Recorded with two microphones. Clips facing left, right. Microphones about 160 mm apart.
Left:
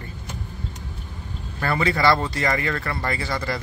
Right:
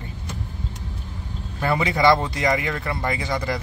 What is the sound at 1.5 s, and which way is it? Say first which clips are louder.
Speech: right 1 dB; 15° right (ahead or behind).